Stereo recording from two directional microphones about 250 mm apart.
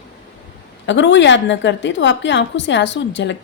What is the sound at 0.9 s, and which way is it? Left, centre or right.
A woman's voice, left.